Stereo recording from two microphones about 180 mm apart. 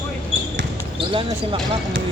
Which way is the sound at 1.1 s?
30° right (ahead or behind).